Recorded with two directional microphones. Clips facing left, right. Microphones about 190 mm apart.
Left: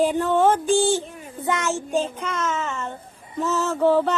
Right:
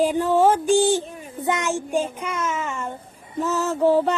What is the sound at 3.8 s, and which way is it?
Child singing, 10° right (ahead or behind).